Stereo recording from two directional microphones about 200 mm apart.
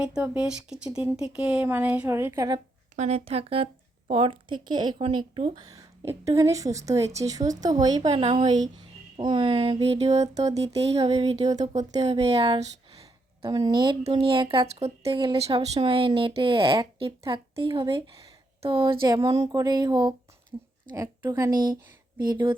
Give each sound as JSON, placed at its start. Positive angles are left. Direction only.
{"t": 0.0, "sound": "a woman's voice", "side_deg": -5}
{"t": 2.9, "sound": "speech", "side_deg": -35}
{"t": 5.6, "sound": "a woman's voice", "side_deg": -15}
{"t": 13.4, "sound": "a woman's voice", "side_deg": -20}